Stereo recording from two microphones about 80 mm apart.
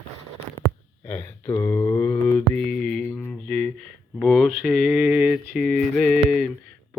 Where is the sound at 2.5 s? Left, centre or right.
Centre.